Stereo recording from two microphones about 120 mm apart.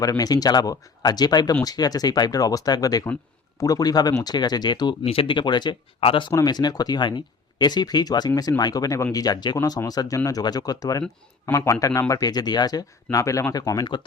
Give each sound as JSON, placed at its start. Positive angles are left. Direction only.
{"t": 0.0, "sound": "speech", "side_deg": 30}
{"t": 5.0, "sound": "speech", "side_deg": 50}
{"t": 6.3, "sound": "speech", "side_deg": 35}